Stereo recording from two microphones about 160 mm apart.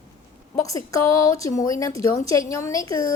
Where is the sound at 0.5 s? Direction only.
20° left (ahead or behind).